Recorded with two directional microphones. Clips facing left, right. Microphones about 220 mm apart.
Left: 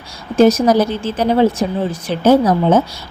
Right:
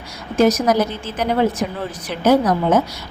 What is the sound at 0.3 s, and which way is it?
Speech, 30° left (ahead or behind).